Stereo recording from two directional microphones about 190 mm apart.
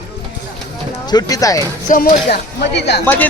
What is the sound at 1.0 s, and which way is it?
Speech, 20° left (ahead or behind).